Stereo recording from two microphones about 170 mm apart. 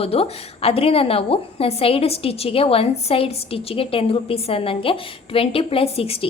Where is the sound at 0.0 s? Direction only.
35° left (ahead or behind).